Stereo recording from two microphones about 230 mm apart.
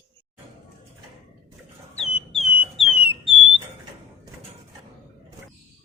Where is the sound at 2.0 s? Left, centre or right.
Centre.